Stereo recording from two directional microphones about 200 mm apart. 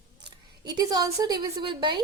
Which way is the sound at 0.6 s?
20° right (ahead or behind).